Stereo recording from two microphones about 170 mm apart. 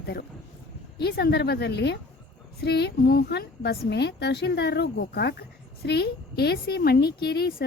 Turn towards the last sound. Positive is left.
turn(degrees=70)  # may be behind; listen again after turning